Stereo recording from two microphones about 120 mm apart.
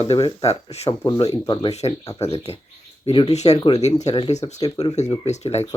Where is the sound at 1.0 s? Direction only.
35° left (ahead or behind).